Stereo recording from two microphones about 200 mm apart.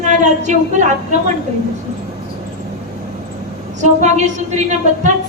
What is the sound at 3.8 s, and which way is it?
Speech, 35° right (ahead or behind).